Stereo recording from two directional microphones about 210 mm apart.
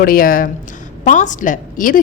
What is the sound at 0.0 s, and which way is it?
A woman's voice, 45° left (ahead or behind).